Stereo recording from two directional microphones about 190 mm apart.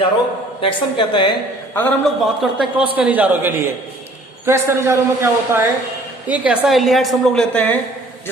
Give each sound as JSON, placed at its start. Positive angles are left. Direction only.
{"t": 0.6, "sound": "a woman's voice", "side_deg": 25}
{"t": 1.7, "sound": "a man's voice", "side_deg": 10}
{"t": 2.4, "sound": "a woman's voice", "side_deg": 0}